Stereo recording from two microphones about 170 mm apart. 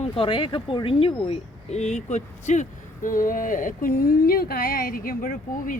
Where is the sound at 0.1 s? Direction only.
30° left (ahead or behind).